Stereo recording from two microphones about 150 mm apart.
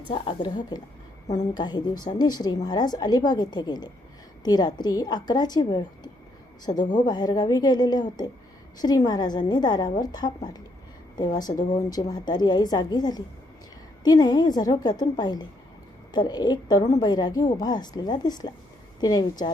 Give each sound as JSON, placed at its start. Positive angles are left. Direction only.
{"t": 0.1, "sound": "a woman's voice", "side_deg": 35}